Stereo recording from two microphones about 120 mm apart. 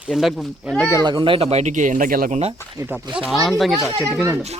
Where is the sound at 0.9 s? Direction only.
35° right (ahead or behind); by 2.5 s 80° right.